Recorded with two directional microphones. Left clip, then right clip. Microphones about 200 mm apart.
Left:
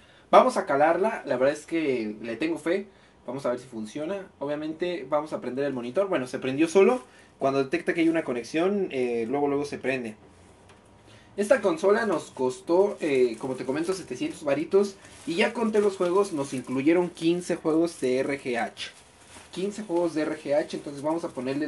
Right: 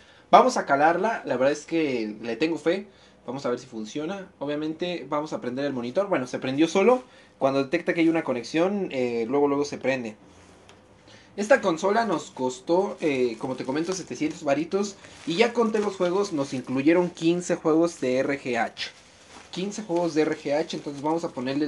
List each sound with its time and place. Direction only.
0.3 s speech: 25° right (ahead or behind)
11.3 s speech: 20° right (ahead or behind)
20.2 s speech: 25° right (ahead or behind)